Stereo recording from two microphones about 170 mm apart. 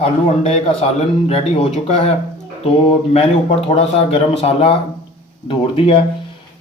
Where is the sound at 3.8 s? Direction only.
35° left (ahead or behind).